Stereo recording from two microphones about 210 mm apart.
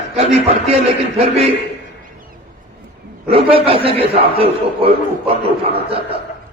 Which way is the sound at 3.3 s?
25° right (ahead or behind).